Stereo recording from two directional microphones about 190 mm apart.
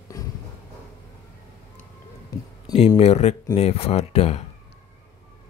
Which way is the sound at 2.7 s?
35° left (ahead or behind).